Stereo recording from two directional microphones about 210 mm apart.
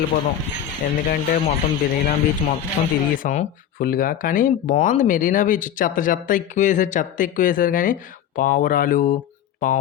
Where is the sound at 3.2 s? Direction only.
40° left (ahead or behind).